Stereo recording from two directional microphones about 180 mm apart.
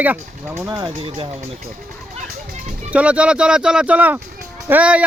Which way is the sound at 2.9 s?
5° right (ahead or behind).